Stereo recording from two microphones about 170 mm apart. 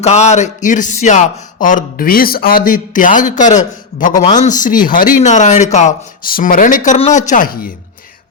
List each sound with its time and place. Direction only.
0.0 s speech: 40° left (ahead or behind)